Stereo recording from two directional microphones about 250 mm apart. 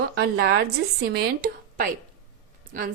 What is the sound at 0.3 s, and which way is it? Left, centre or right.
A woman's voice, right.